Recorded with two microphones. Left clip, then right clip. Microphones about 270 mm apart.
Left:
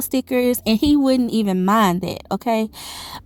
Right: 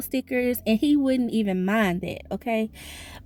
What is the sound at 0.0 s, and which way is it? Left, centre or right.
Speech, centre.